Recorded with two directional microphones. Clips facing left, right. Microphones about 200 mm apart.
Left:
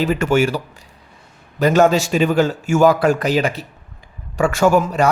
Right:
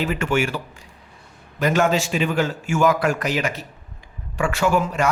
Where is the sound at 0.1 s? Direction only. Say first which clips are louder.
Left 6 dB; 40° left (ahead or behind).